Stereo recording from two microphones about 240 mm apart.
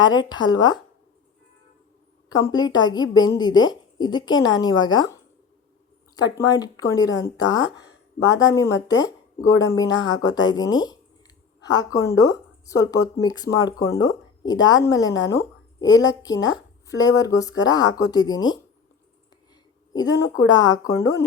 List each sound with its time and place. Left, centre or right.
0.0 s a woman's voice: centre
2.3 s a woman's voice: centre
6.1 s a woman's voice: centre
19.9 s a woman's voice: centre